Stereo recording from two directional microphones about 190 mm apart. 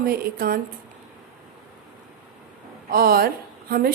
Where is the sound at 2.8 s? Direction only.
50° right (ahead or behind).